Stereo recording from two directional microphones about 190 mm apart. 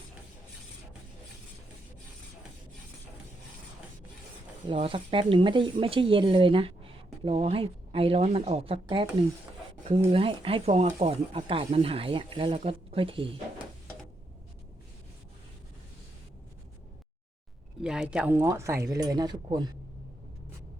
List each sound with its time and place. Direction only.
4.6 s speech: 25° right (ahead or behind)
10.1 s speech: 30° right (ahead or behind)
17.8 s speech: 5° right (ahead or behind); by 19.6 s 20° right (ahead or behind)